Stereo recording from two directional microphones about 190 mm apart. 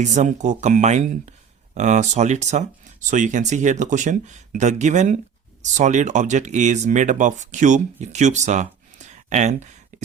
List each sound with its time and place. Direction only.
0.0 s speech: 40° right (ahead or behind)